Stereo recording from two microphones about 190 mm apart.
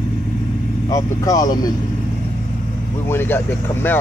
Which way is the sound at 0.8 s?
20° left (ahead or behind).